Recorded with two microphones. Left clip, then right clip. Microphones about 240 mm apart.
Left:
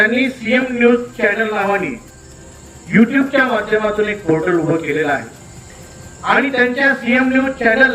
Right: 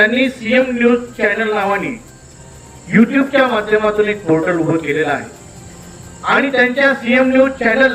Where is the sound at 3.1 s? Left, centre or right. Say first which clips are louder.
Right 1 dB; centre.